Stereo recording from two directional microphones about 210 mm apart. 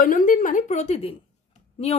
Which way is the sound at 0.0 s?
40° left (ahead or behind).